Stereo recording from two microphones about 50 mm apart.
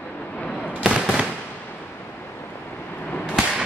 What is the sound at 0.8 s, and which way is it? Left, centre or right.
Fireworks, centre.